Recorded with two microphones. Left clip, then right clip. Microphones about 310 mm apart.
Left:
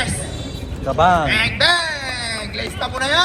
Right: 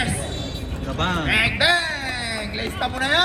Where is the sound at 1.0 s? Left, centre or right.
Centre.